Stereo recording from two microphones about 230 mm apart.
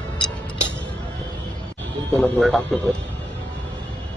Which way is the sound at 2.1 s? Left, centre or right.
Centre.